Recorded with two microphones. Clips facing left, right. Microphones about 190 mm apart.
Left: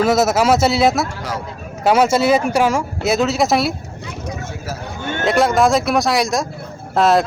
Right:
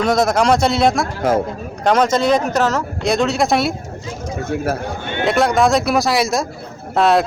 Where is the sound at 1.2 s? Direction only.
50° right (ahead or behind).